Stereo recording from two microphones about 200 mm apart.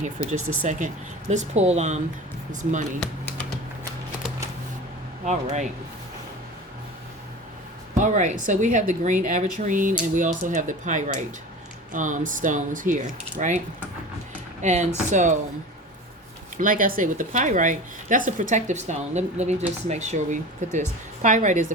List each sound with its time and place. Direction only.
0.0 s speech: 35° right (ahead or behind)
5.2 s speech: 35° right (ahead or behind)
7.9 s speech: 40° right (ahead or behind)
14.6 s speech: 35° right (ahead or behind)
16.6 s speech: 45° right (ahead or behind)